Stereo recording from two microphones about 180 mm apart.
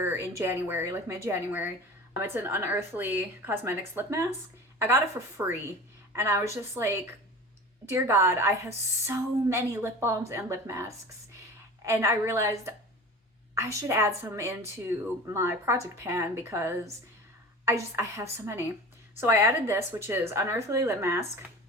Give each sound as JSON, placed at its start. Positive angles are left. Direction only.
{"t": 0.0, "sound": "a woman's voice", "side_deg": -15}
{"t": 5.4, "sound": "a woman's voice", "side_deg": -10}
{"t": 17.9, "sound": "a woman's voice", "side_deg": -15}